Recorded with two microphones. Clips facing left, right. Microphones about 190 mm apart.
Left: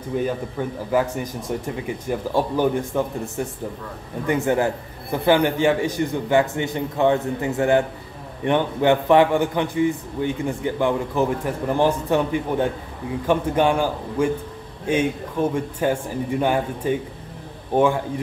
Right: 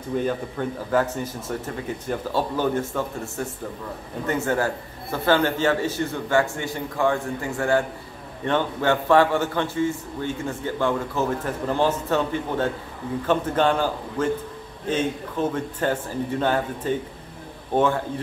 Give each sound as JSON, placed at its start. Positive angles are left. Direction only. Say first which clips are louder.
{"t": 0.2, "sound": "a man's voice", "louder": "left 1 dB", "side_deg": 10}